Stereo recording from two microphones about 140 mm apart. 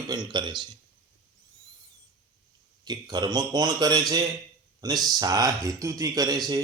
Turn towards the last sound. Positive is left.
turn(degrees=-25)  # may be behind; listen again after turning